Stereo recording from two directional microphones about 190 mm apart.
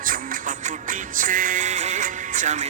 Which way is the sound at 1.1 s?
45° right (ahead or behind).